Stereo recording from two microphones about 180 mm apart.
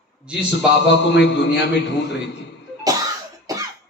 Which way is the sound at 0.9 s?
75° left (ahead or behind).